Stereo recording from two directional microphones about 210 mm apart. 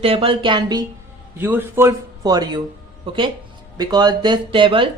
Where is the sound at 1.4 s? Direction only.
10° right (ahead or behind).